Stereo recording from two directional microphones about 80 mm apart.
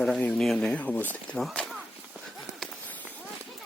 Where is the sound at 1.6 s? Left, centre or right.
Centre.